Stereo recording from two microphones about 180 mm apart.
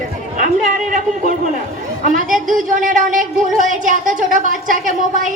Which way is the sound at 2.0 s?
45° right (ahead or behind).